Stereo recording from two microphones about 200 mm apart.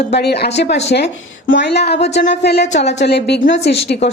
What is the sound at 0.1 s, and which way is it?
A woman's voice, 55° left (ahead or behind).